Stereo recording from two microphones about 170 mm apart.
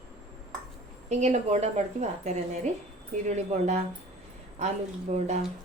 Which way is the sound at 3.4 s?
40° right (ahead or behind).